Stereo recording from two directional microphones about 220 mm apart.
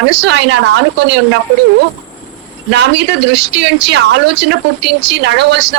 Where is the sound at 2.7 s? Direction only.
50° right (ahead or behind).